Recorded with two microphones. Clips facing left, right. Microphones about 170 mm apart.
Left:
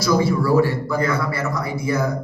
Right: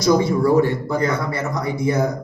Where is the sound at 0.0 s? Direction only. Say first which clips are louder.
Right 2 dB; 20° right (ahead or behind).